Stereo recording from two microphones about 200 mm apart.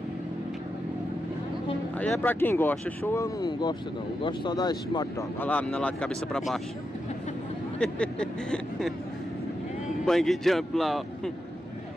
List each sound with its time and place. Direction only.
2.0 s speech: 10° left (ahead or behind)
5.4 s speech: 5° left (ahead or behind)
7.8 s speech: 5° left (ahead or behind)
10.0 s speech: centre (ahead or behind)